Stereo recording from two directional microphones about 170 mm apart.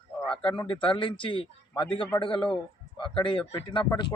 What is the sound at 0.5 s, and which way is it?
A man's voice, 30° left (ahead or behind).